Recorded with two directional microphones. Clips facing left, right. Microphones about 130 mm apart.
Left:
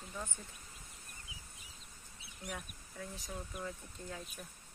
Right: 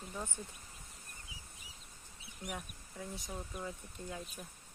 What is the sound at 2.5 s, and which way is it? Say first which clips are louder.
Speech: right 1 dB; 15° right (ahead or behind).